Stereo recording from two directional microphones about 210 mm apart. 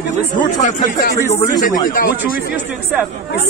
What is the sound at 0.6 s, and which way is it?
Speech, 35° left (ahead or behind).